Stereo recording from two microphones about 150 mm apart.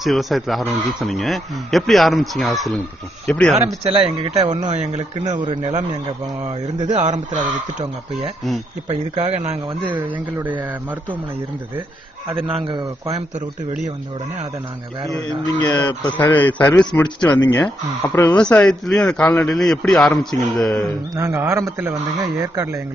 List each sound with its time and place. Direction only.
0.0 s speech: centre (ahead or behind)
3.5 s speech: 50° right (ahead or behind)
3.9 s speech: 35° right (ahead or behind)
4.6 s speech: 50° right (ahead or behind)
5.3 s speech: 30° right (ahead or behind)
6.9 s speech: 50° right (ahead or behind)
8.8 s speech: 45° right (ahead or behind)
12.4 s speech: 35° right (ahead or behind)
15.6 s speech: 25° left (ahead or behind)
16.2 s a man's voice: 15° left (ahead or behind)
17.3 s speech: 25° left (ahead or behind)
18.1 s a man's voice: 10° left (ahead or behind)
21.2 s speech: 20° right (ahead or behind)